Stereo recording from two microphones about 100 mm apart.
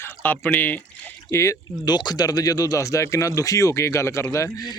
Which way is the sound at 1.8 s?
45° left (ahead or behind).